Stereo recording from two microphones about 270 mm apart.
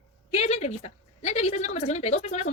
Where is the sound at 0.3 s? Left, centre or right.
Left.